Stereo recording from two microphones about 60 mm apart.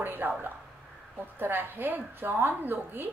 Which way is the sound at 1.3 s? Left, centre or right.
Right.